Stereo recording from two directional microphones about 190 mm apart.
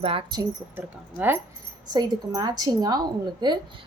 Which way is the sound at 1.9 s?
20° right (ahead or behind).